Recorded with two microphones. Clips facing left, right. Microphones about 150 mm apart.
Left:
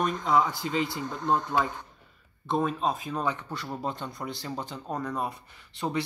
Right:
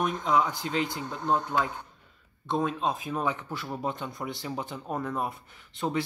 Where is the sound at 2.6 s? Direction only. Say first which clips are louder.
Left 1 dB; 5° left (ahead or behind).